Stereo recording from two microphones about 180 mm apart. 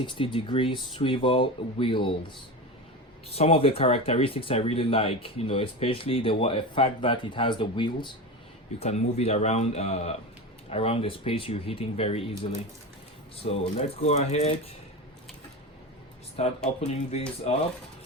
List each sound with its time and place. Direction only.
0.0 s speech: 30° left (ahead or behind)
3.2 s speech: 35° left (ahead or behind)
8.8 s speech: 35° left (ahead or behind)
13.3 s speech: 35° left (ahead or behind)
16.4 s speech: 35° left (ahead or behind)